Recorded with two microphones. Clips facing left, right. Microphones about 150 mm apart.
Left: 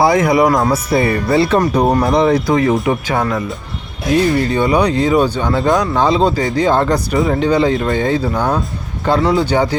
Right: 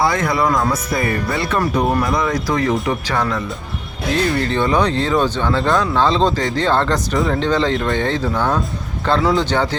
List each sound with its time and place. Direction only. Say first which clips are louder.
0.0 s speech: left 6 dB; 25° left (ahead or behind)